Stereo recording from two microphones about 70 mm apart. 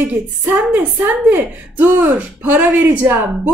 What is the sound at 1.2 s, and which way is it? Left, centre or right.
Speech, right.